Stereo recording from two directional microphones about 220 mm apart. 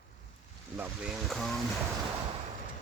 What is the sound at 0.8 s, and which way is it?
Speech, 5° right (ahead or behind).